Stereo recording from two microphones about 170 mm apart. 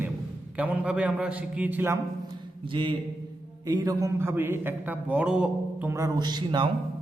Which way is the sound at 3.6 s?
20° right (ahead or behind).